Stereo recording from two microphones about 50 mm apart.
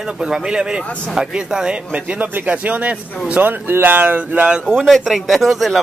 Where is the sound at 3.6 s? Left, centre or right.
Right.